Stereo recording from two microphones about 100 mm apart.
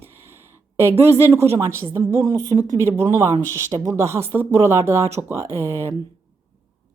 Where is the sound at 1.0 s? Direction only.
25° right (ahead or behind).